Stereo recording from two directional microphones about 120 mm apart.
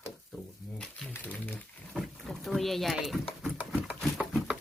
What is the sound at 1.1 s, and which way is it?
Speech, 15° left (ahead or behind).